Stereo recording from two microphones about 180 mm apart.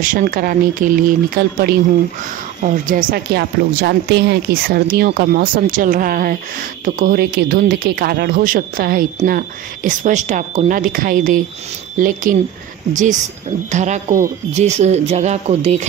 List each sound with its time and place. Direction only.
0.0 s speech: 50° right (ahead or behind)
9.8 s speech: 45° right (ahead or behind)